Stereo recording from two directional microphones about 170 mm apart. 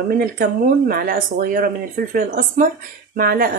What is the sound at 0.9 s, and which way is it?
Speech, 60° right (ahead or behind).